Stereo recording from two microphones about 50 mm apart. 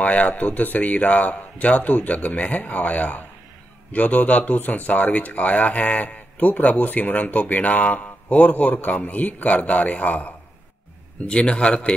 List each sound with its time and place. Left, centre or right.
0.0 s a man's voice: left
11.2 s a man's voice: left